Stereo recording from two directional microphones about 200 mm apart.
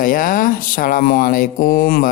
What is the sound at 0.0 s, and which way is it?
Speech, 40° left (ahead or behind).